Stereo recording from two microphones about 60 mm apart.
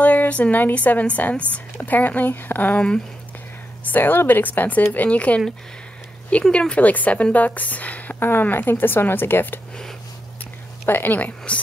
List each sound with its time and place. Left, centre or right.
0.0 s a woman's voice: left
3.8 s a woman's voice: left
6.5 s a woman's voice: centre; by 9.6 s left
10.9 s a woman's voice: left